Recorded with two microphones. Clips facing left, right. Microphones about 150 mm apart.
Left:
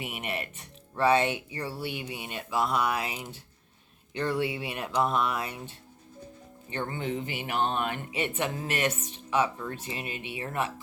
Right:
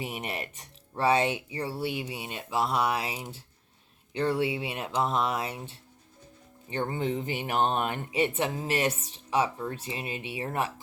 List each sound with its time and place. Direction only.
0.0 s speech: 35° right (ahead or behind)
6.7 s speech: 35° right (ahead or behind)